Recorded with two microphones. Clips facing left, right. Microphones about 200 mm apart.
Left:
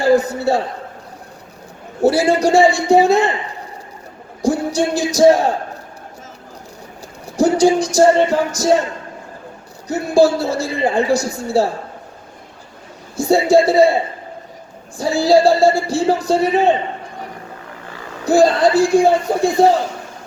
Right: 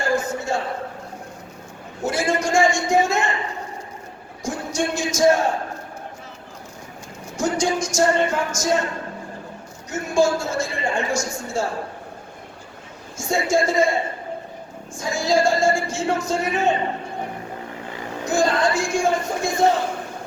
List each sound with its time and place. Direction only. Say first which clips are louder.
0.0 s a sound: left 9 dB; 35° left (ahead or behind)
2.0 s speech: left 9 dB; 35° left (ahead or behind)
4.4 s music: left 8 dB; 35° left (ahead or behind)
7.3 s music: left 9 dB; 35° left (ahead or behind)
9.9 s speech: left 6 dB; 35° left (ahead or behind)
13.1 s speech: left 8 dB; 35° left (ahead or behind)
14.9 s speech: left 7 dB; 35° left (ahead or behind)
18.3 s speech: left 8 dB; 35° left (ahead or behind)